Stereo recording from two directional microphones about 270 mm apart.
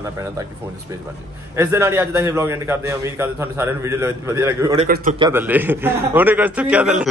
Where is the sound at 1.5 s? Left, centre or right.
Centre.